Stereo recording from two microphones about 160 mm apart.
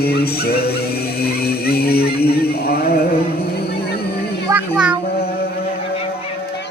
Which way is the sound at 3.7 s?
80° left.